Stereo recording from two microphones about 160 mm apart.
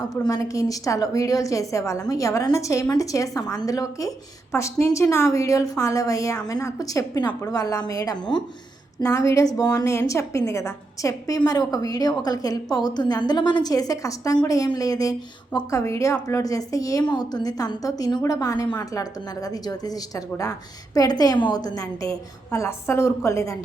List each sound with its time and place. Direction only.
0.3 s a woman's voice: 20° left (ahead or behind)